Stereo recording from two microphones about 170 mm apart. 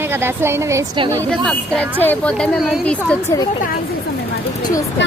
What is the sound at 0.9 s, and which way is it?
Speech, 30° right (ahead or behind).